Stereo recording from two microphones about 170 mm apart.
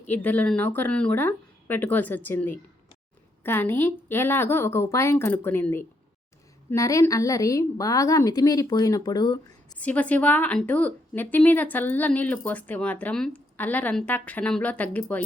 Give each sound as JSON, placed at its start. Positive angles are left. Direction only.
{"t": 0.0, "sound": "a woman's voice", "side_deg": 10}
{"t": 9.7, "sound": "speech", "side_deg": 10}